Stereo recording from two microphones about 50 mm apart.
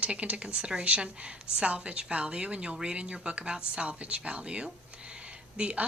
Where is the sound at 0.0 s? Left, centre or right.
Right.